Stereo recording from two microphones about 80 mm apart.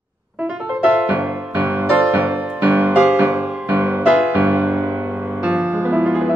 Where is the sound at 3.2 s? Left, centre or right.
Right.